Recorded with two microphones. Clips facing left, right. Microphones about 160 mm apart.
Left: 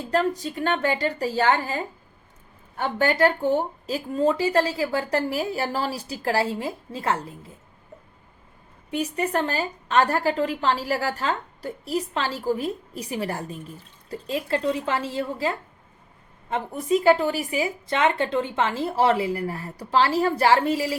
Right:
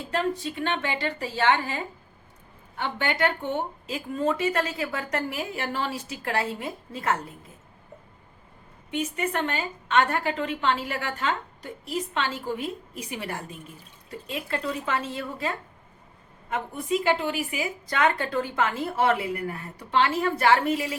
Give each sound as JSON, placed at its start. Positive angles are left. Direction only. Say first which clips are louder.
{"t": 0.1, "sound": "a woman's voice", "louder": "left 4 dB", "side_deg": 40}
{"t": 8.9, "sound": "a woman's voice", "louder": "left 3 dB", "side_deg": 35}
{"t": 16.7, "sound": "a woman's voice", "louder": "left 6 dB", "side_deg": 40}